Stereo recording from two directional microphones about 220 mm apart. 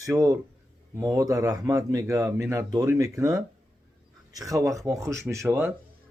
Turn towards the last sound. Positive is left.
turn(degrees=-10)  # may be behind; listen again after turning